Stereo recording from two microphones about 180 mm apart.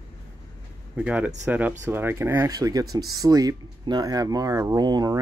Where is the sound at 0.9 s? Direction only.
5° right (ahead or behind).